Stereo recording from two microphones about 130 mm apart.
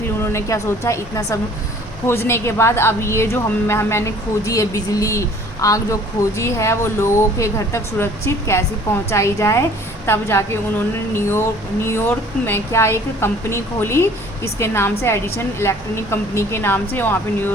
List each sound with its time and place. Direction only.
0.2 s a woman's voice: 20° left (ahead or behind)